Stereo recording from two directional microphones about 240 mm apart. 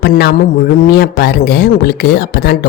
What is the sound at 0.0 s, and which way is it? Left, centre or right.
A woman's voice, left.